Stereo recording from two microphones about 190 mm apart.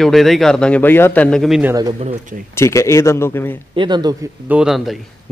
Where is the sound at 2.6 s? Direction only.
15° left (ahead or behind).